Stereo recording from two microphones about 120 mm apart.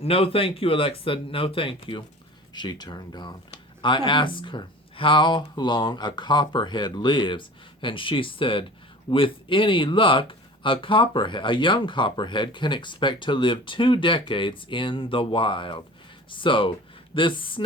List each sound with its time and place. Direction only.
0.0 s speech: 55° left (ahead or behind)